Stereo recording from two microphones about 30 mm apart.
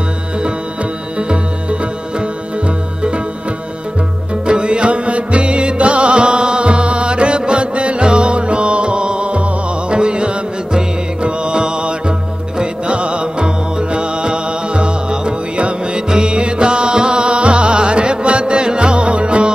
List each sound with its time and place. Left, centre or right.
1.1 s music: right
4.5 s music: right